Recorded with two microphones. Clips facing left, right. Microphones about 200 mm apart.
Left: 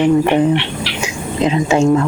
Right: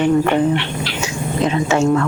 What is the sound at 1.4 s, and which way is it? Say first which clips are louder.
Speech: left 3 dB; 25° left (ahead or behind).